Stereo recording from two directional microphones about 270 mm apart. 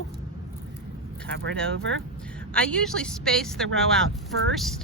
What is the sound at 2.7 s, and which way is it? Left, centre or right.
Speech, centre.